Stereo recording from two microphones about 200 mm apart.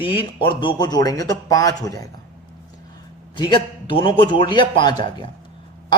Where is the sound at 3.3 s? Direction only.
25° left (ahead or behind).